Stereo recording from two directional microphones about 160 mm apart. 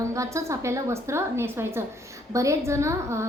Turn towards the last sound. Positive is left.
turn(degrees=-15)  # may be behind; listen again after turning